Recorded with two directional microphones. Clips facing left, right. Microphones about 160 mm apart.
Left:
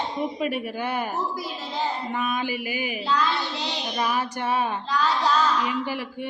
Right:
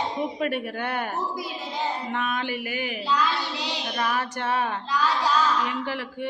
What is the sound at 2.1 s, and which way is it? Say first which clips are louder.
Speech: left 1 dB; 5° left (ahead or behind).